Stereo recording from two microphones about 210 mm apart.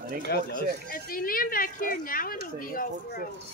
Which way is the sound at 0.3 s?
50° left (ahead or behind).